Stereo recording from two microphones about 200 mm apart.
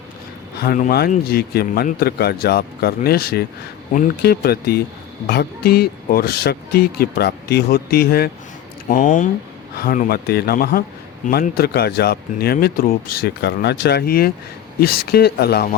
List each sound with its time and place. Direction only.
0.6 s speech: 45° left (ahead or behind)
8.9 s speech: 40° left (ahead or behind)